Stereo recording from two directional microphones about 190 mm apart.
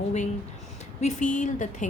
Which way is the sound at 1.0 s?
40° left (ahead or behind).